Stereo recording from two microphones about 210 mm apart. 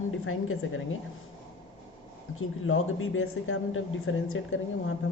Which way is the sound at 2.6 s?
75° left (ahead or behind).